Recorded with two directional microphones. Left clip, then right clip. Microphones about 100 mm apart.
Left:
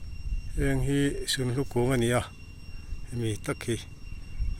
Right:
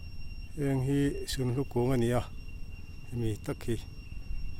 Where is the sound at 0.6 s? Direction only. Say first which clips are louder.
Left 3 dB; 25° right (ahead or behind).